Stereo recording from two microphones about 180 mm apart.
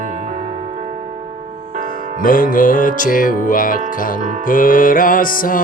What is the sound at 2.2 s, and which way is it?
Music, 50° left (ahead or behind).